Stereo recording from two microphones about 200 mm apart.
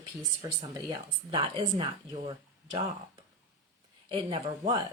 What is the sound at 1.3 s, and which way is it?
Speech, 25° right (ahead or behind).